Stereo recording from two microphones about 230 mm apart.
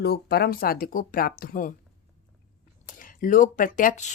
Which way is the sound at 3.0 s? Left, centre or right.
Left.